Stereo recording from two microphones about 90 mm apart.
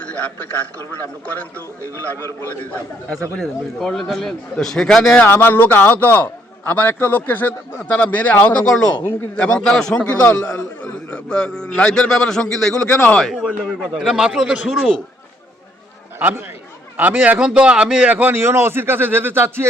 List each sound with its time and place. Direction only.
0.0 s a sound: 15° left (ahead or behind)
1.2 s a man's voice: 15° left (ahead or behind)
3.3 s a man's voice: 5° left (ahead or behind)
5.2 s a man's voice: 25° left (ahead or behind); by 12.9 s 5° left (ahead or behind)
12.9 s a man's voice: 15° left (ahead or behind)
13.1 s a man's voice: 5° left (ahead or behind)
16.1 s a man's voice: 25° right (ahead or behind)